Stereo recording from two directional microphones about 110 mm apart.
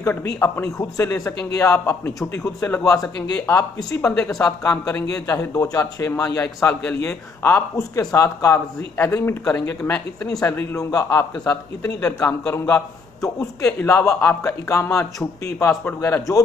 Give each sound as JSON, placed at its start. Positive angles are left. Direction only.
{"t": 0.0, "sound": "speech", "side_deg": 25}
{"t": 3.3, "sound": "speech", "side_deg": 20}